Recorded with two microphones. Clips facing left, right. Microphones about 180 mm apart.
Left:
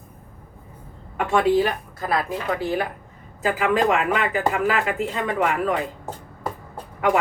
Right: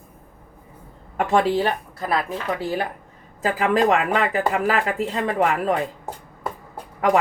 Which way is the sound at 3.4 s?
35° right (ahead or behind).